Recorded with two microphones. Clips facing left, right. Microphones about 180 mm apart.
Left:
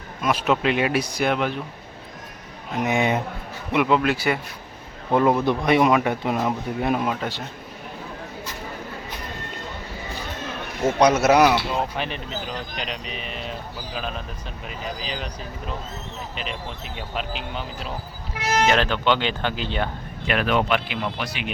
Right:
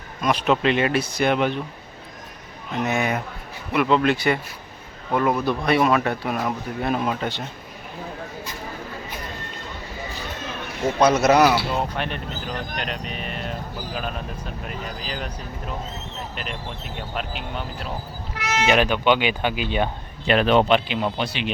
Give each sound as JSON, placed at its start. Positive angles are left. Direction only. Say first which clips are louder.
{"t": 0.2, "sound": "speech", "louder": "right 1 dB", "side_deg": 5}
{"t": 1.3, "sound": "speech", "louder": "right 3 dB", "side_deg": 0}
{"t": 2.7, "sound": "speech", "louder": "left 2 dB", "side_deg": 15}
{"t": 5.1, "sound": "speech", "louder": "left 2 dB", "side_deg": 20}
{"t": 10.8, "sound": "speech", "louder": "even", "side_deg": 5}
{"t": 15.0, "sound": "speech", "louder": "even", "side_deg": 0}
{"t": 16.3, "sound": "speech", "louder": "left 2 dB", "side_deg": 0}
{"t": 18.6, "sound": "speech", "louder": "right 3 dB", "side_deg": -15}
{"t": 20.2, "sound": "speech", "louder": "right 4 dB", "side_deg": -30}